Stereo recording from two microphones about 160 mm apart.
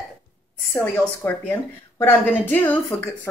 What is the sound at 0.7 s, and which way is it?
A woman's voice, 15° left (ahead or behind).